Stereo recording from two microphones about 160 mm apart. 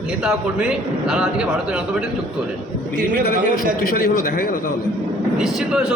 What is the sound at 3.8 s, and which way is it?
Speech, 70° left (ahead or behind).